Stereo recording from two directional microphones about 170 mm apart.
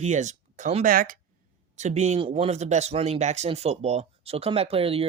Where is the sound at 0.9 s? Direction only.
55° right (ahead or behind).